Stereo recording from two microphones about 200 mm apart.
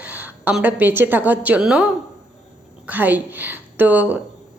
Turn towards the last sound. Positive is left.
turn(degrees=-10)  # may be behind; listen again after turning